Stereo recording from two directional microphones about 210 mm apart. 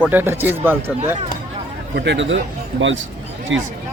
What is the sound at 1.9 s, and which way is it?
Speech, 55° right (ahead or behind).